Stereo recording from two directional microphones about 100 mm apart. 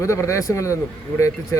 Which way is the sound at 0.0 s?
30° left (ahead or behind).